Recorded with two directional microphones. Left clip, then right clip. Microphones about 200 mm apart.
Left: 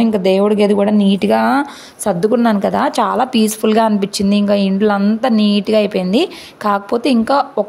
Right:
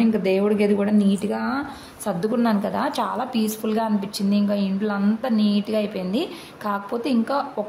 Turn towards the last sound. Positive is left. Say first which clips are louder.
# left 10 dB
turn(degrees=40)  # may be behind; listen again after turning